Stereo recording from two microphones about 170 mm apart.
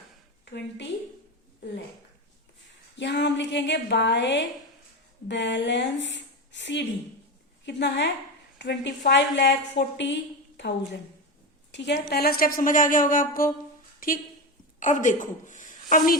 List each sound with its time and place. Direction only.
3.0 s a woman's voice: 90° left
11.7 s a woman's voice: 85° left; by 16.1 s 50° left (ahead or behind)